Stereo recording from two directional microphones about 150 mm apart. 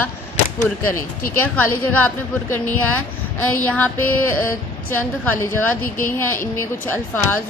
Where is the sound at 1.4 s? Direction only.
10° left (ahead or behind).